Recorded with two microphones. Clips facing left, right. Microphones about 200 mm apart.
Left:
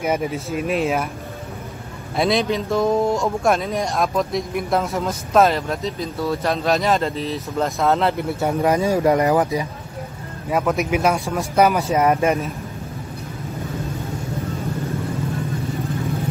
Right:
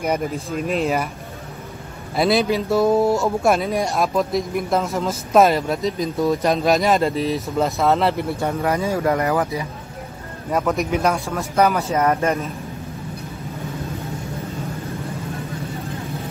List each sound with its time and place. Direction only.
0.0 s speech: 5° left (ahead or behind)
2.1 s speech: 5° right (ahead or behind)
5.3 s speech: 10° right (ahead or behind)
8.6 s speech: 20° left (ahead or behind)
10.5 s speech: centre (ahead or behind)